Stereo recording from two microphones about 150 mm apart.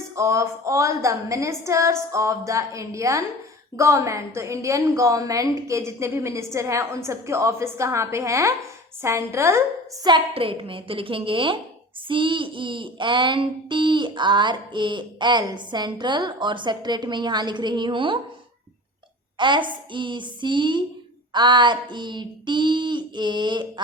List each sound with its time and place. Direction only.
0.2 s a woman's voice: 20° right (ahead or behind)
19.4 s speech: 30° right (ahead or behind)